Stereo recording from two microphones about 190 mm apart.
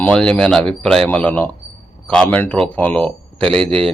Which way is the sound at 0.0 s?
5° left (ahead or behind).